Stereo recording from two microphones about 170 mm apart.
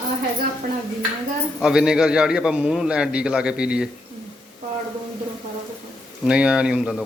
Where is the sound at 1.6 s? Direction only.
5° right (ahead or behind).